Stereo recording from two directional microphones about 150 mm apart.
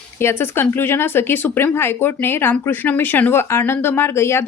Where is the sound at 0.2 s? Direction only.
15° left (ahead or behind).